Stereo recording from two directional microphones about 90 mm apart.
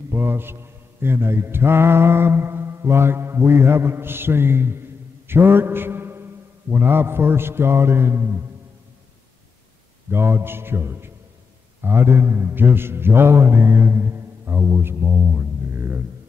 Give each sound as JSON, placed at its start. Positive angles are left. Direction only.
{"t": 0.1, "sound": "a man's voice", "side_deg": -25}
{"t": 5.3, "sound": "mantra", "side_deg": -25}
{"t": 10.1, "sound": "mantra", "side_deg": -25}
{"t": 11.8, "sound": "a man's voice", "side_deg": -25}